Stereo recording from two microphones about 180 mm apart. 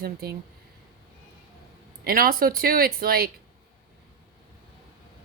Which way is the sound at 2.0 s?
55° right (ahead or behind).